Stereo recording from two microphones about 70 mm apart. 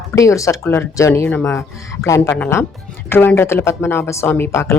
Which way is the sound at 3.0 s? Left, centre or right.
Left.